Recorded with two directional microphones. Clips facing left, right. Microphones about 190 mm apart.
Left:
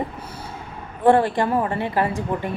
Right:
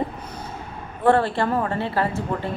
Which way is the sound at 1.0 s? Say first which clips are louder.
Left 2 dB; 15° left (ahead or behind).